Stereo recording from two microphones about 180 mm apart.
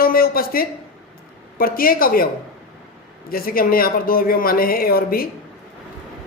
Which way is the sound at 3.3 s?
55° left (ahead or behind).